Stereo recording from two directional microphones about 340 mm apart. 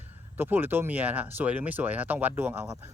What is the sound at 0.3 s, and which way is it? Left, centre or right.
Speech, centre.